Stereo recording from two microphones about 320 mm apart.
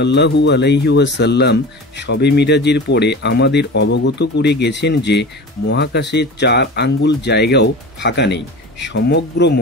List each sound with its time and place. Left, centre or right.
0.0 s speech: left